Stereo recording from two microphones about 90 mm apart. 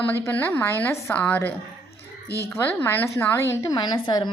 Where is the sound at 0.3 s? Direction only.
25° left (ahead or behind); by 3.9 s 45° left (ahead or behind).